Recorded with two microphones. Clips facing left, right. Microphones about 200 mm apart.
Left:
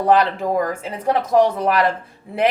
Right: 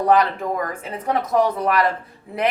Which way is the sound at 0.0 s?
30° left (ahead or behind).